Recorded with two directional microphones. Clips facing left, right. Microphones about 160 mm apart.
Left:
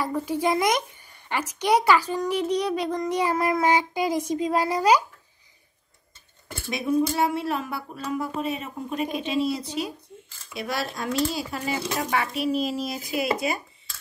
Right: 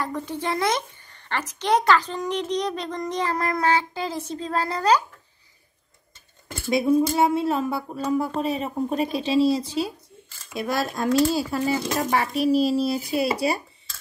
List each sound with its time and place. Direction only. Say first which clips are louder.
0.0 s a woman's voice: left 3 dB; 10° left (ahead or behind)
6.7 s speech: right 4 dB; 30° right (ahead or behind)
10.5 s speech: right 4 dB; 45° right (ahead or behind)